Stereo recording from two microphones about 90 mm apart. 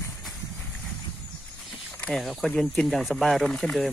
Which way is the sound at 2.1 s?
Centre (ahead or behind).